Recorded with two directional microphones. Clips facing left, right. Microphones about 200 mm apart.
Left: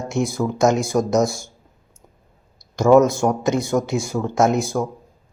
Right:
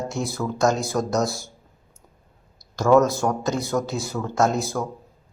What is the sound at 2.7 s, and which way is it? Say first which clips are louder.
Speech: left 4 dB; 20° left (ahead or behind).